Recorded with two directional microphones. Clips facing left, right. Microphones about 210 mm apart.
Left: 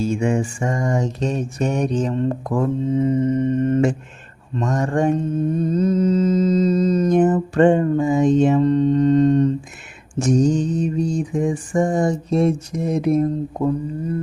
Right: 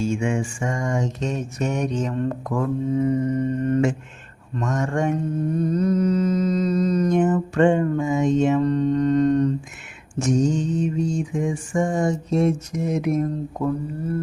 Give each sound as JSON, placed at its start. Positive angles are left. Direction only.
{"t": 0.0, "sound": "mantra", "side_deg": 35}
{"t": 4.5, "sound": "mantra", "side_deg": 35}
{"t": 10.2, "sound": "mantra", "side_deg": 35}
{"t": 13.7, "sound": "speech", "side_deg": 20}